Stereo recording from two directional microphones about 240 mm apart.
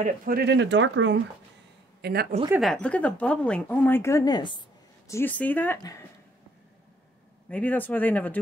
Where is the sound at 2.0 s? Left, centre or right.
Right.